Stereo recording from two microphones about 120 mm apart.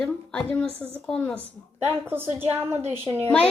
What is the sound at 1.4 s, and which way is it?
A woman's voice, 20° right (ahead or behind).